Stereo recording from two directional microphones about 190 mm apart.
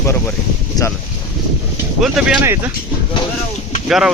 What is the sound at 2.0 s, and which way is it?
Speech, 5° right (ahead or behind).